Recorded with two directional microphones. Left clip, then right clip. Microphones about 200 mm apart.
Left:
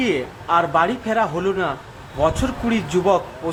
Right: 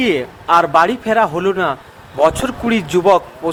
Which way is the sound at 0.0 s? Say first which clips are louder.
Right 5 dB; 35° right (ahead or behind).